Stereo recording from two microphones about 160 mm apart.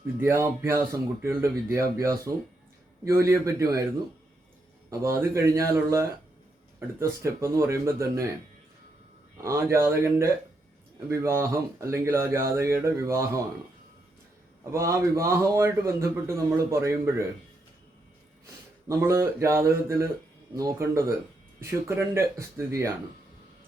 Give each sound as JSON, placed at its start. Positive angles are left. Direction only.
{"t": 0.2, "sound": "a man's voice", "side_deg": -15}
{"t": 4.9, "sound": "a man's voice", "side_deg": -15}
{"t": 9.4, "sound": "a man's voice", "side_deg": -15}
{"t": 14.7, "sound": "a man's voice", "side_deg": -20}
{"t": 18.9, "sound": "a man's voice", "side_deg": -20}